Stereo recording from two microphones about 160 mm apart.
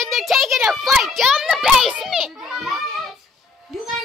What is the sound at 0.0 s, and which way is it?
A child's voice, centre (ahead or behind).